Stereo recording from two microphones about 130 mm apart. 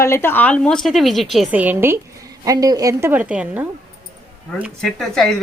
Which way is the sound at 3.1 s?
10° right (ahead or behind).